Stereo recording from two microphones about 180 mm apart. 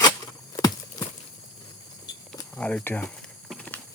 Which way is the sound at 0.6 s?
20° left (ahead or behind).